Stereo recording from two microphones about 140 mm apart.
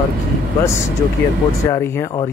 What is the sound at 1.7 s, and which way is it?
Speech, 20° left (ahead or behind).